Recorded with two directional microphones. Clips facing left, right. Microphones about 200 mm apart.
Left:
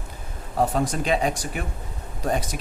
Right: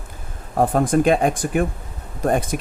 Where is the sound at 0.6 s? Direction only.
50° right (ahead or behind).